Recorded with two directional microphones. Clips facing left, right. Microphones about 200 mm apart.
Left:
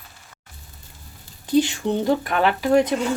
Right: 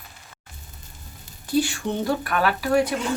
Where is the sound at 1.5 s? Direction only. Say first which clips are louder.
Left 4 dB; 20° left (ahead or behind).